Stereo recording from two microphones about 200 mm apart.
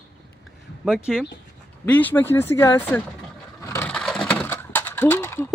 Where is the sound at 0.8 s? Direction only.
5° right (ahead or behind).